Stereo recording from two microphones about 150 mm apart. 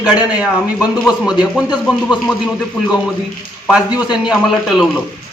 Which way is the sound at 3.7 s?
10° right (ahead or behind).